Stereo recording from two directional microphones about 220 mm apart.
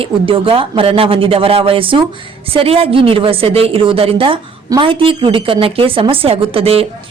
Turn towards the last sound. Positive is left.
turn(degrees=-25)  # may be behind; listen again after turning